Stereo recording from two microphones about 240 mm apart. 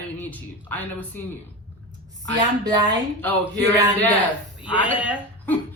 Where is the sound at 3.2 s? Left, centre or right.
Centre.